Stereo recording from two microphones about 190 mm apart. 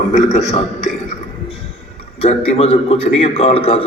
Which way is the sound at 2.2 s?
35° left (ahead or behind).